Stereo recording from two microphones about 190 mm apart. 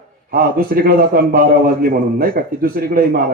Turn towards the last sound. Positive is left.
turn(degrees=-50)  # may be behind; listen again after turning